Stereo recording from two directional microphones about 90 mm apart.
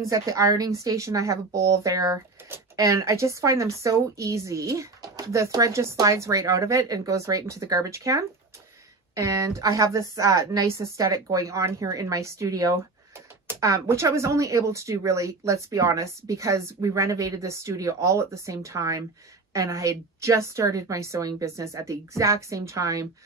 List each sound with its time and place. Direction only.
0.0 s speech: 40° right (ahead or behind)